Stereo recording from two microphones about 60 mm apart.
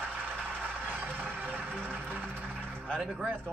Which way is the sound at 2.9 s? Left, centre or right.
Centre.